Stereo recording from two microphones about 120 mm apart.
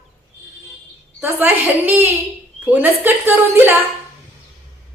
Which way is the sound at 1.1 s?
15° right (ahead or behind).